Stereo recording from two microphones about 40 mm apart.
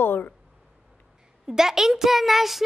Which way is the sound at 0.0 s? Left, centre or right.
Left.